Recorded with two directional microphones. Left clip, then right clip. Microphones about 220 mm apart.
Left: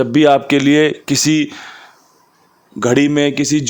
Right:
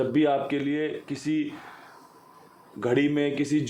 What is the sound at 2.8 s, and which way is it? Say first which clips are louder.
Speech: left 11 dB; 50° left (ahead or behind).